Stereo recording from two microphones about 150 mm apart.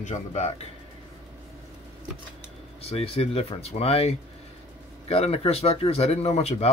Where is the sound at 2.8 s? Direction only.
40° left (ahead or behind).